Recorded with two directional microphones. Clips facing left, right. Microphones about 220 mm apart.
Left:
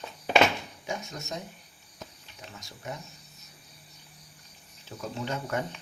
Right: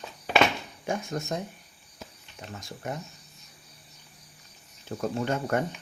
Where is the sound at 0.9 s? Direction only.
55° right (ahead or behind).